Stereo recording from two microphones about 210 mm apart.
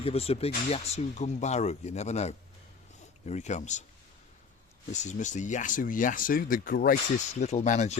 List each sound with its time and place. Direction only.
0.0 s speech: 30° left (ahead or behind)
4.9 s speech: 35° left (ahead or behind)